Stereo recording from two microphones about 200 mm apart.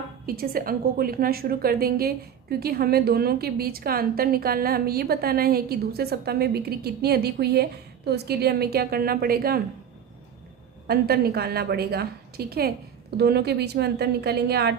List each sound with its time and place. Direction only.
0.3 s a woman's voice: 50° right (ahead or behind)
10.8 s a woman's voice: 50° right (ahead or behind)